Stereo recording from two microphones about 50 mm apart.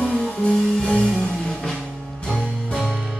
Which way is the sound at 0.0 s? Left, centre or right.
Left.